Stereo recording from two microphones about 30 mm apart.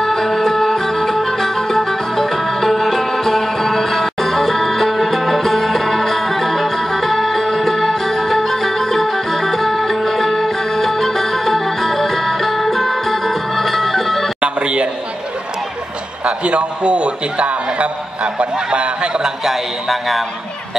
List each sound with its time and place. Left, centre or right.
0.0 s music: centre
14.4 s music: right
16.4 s a sound: right
19.4 s speech: centre